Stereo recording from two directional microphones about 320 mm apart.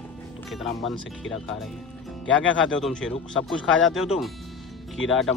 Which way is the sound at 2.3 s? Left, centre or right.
Left.